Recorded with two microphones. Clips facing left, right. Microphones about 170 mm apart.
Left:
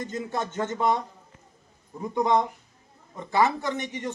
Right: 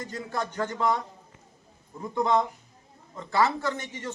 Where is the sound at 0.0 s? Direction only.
20° left (ahead or behind).